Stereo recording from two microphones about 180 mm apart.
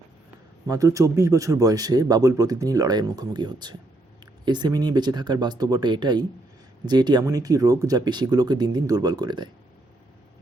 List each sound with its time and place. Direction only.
0.7 s speech: 20° right (ahead or behind)